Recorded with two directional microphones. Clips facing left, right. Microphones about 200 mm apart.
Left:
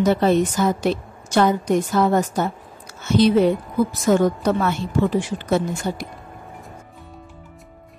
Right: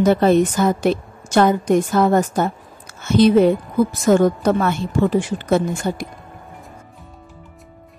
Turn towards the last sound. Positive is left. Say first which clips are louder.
# right 3 dB
turn(degrees=-50)  # may be behind; listen again after turning